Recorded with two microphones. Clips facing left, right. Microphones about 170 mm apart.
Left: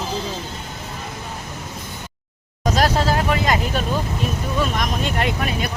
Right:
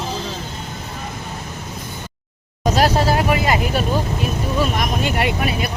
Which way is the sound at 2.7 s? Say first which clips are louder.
Right 2 dB; 10° right (ahead or behind).